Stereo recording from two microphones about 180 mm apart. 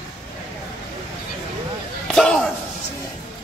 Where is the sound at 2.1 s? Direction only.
5° left (ahead or behind).